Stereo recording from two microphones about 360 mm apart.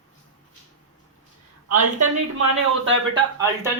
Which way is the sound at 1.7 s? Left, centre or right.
Right.